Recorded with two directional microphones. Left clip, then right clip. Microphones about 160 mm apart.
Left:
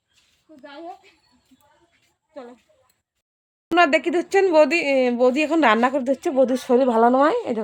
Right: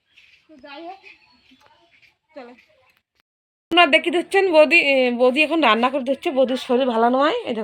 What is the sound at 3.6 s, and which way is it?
A woman's voice, centre (ahead or behind).